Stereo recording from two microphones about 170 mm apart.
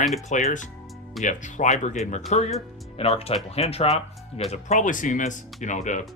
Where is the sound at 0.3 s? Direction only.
45° left (ahead or behind).